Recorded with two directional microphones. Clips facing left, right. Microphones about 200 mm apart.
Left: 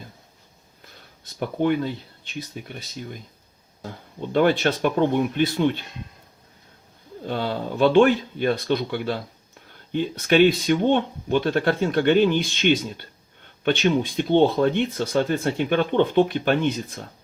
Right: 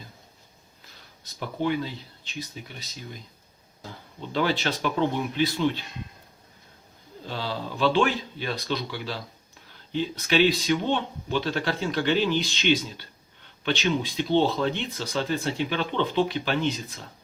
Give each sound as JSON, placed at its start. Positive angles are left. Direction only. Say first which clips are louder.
{"t": 1.2, "sound": "speech", "louder": "left 5 dB", "side_deg": 55}
{"t": 3.8, "sound": "speech", "louder": "left 6 dB", "side_deg": 55}
{"t": 7.3, "sound": "speech", "louder": "left 6 dB", "side_deg": 55}